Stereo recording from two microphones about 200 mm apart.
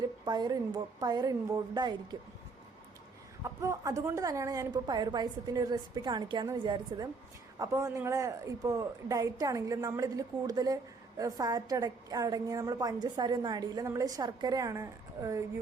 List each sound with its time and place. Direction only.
0.0 s a woman's voice: 20° right (ahead or behind)
3.4 s a woman's voice: 15° right (ahead or behind)